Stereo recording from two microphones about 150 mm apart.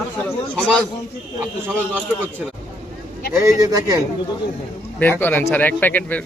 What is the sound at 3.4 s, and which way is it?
Speech, 20° right (ahead or behind).